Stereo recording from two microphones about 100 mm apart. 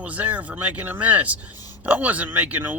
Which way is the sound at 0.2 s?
15° right (ahead or behind).